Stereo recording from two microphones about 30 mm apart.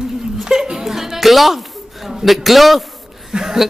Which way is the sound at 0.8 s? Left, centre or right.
Centre.